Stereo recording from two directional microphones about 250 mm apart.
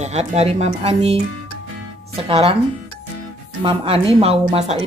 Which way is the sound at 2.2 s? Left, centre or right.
Right.